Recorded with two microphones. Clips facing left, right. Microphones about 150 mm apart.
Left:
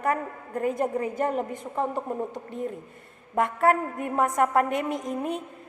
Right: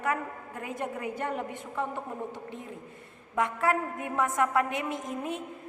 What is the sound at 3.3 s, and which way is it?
A woman's voice, 50° left (ahead or behind).